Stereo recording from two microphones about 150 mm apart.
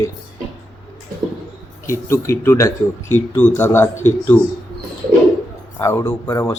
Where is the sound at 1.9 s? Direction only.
20° left (ahead or behind).